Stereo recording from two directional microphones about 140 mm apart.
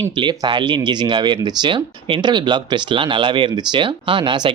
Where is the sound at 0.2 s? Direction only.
35° right (ahead or behind).